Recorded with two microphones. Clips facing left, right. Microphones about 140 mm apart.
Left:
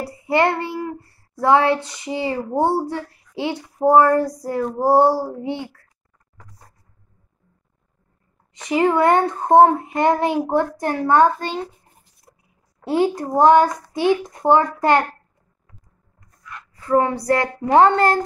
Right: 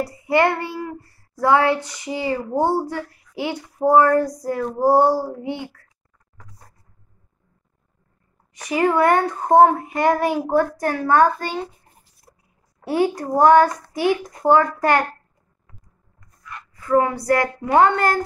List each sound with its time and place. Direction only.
0.0 s a child's voice: 25° left (ahead or behind)
8.5 s a child's voice: 25° left (ahead or behind)
12.8 s a child's voice: 20° left (ahead or behind)
16.8 s a woman's voice: 30° left (ahead or behind)